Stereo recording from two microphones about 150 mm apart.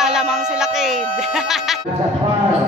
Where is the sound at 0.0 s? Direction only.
5° right (ahead or behind).